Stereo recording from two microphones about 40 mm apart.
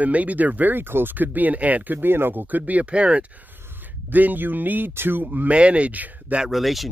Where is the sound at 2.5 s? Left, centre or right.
Right.